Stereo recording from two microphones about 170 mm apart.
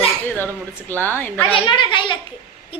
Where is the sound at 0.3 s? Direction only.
10° left (ahead or behind).